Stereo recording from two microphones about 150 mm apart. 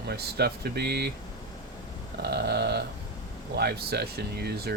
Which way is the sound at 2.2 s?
90° right.